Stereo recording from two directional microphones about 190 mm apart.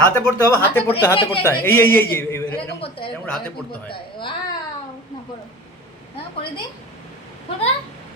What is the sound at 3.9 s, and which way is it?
Speech, 25° left (ahead or behind).